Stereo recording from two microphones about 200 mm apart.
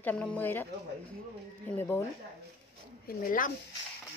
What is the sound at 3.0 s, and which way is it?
Speech, 40° left (ahead or behind).